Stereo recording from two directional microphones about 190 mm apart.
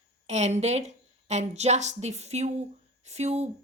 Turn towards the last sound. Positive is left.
turn(degrees=-35)  # may be behind; listen again after turning